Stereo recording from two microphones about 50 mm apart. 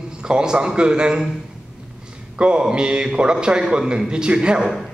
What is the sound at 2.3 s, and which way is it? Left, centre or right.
A man's voice, centre.